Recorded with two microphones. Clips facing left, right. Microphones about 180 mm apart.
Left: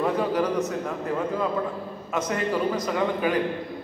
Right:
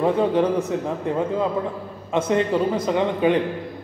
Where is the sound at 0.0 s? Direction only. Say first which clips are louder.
Right 5 dB; 25° right (ahead or behind).